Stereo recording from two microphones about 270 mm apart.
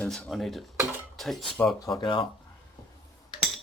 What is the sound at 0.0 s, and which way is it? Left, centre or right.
Speech, centre.